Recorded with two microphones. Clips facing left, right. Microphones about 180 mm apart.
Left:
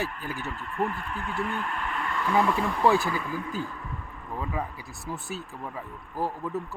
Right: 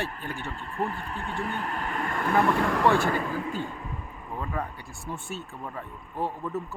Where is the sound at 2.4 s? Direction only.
75° right (ahead or behind).